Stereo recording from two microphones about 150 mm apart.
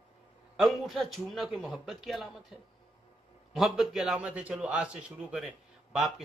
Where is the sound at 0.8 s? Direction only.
Centre (ahead or behind).